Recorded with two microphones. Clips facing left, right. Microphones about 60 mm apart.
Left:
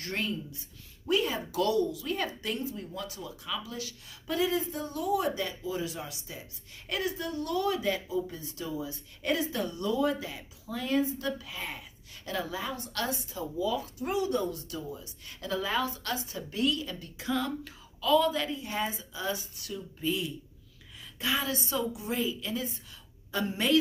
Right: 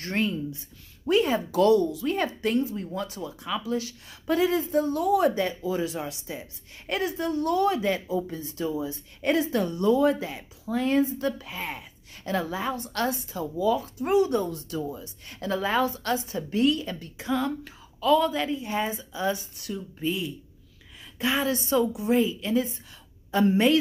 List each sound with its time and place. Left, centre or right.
0.0 s a woman's voice: right
17.3 s a woman's voice: right
19.6 s a woman's voice: right
21.2 s a woman's voice: right
21.6 s a woman's voice: right
23.3 s speech: right